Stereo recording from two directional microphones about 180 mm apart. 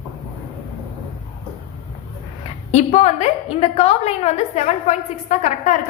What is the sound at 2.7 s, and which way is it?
A woman's voice, 40° left (ahead or behind).